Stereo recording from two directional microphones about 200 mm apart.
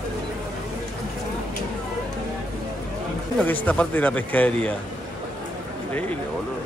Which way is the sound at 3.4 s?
5° left (ahead or behind).